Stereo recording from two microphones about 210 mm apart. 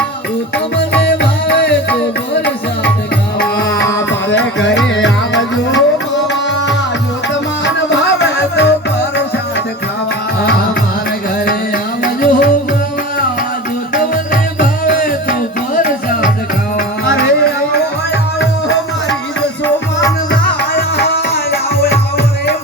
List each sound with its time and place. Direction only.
0.8 s music: 55° left (ahead or behind)
7.6 s music: 55° left (ahead or behind)
12.0 s music: 45° left (ahead or behind)
14.6 s music: 40° left (ahead or behind); by 19.1 s 60° left (ahead or behind)
20.6 s music: 50° left (ahead or behind)